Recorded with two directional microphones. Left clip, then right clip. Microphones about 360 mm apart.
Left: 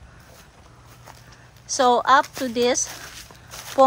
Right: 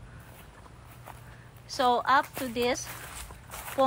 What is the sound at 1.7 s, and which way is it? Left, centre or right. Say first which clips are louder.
Speech: left 7 dB; centre.